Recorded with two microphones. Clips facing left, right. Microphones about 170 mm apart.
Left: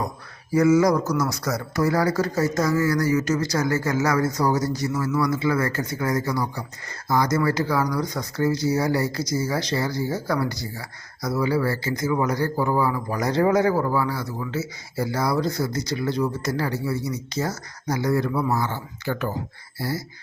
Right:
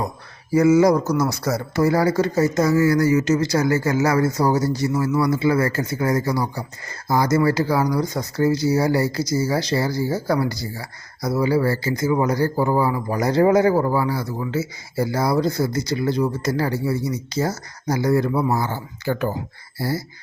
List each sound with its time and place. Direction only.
0.5 s speech: 25° right (ahead or behind)